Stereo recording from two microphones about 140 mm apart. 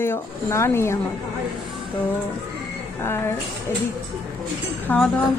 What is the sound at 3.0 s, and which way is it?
Speech, 15° left (ahead or behind).